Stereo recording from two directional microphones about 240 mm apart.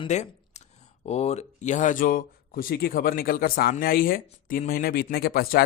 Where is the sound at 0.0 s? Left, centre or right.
Left.